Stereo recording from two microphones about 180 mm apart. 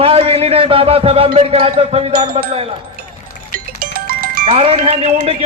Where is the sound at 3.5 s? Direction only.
50° right (ahead or behind).